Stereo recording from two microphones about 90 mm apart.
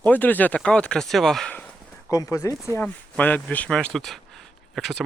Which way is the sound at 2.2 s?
35° left (ahead or behind).